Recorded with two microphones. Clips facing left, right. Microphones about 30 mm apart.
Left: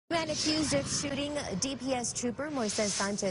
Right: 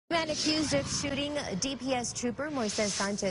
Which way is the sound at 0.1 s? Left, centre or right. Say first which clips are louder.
Right 1 dB; centre.